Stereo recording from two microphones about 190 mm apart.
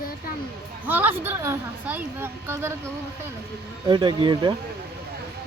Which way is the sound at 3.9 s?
25° right (ahead or behind).